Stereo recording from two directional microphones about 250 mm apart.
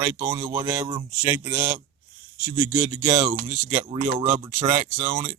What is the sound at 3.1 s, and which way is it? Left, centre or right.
Speech, right.